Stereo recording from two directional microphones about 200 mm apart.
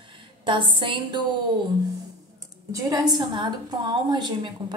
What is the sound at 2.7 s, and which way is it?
A woman's voice, 15° right (ahead or behind).